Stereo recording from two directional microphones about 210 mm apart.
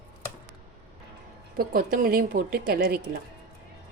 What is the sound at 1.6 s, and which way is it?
A woman's voice, 45° right (ahead or behind).